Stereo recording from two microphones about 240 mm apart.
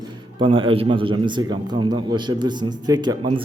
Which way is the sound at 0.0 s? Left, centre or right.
Centre.